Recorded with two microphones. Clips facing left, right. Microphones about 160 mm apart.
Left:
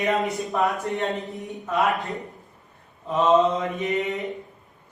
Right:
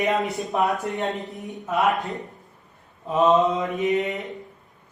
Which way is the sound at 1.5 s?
Centre (ahead or behind).